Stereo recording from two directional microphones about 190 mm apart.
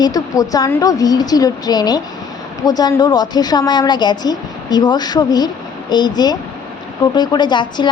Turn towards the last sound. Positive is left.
turn(degrees=25)  # may be behind; listen again after turning